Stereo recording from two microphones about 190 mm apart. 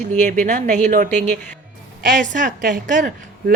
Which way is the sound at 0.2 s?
40° right (ahead or behind).